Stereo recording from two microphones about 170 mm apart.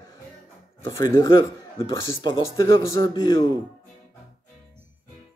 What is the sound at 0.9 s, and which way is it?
Speech, 20° left (ahead or behind).